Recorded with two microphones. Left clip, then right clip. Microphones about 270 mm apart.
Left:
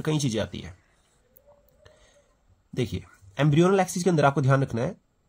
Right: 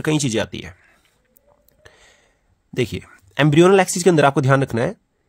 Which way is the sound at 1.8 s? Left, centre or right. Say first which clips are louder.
Right 11 dB; right.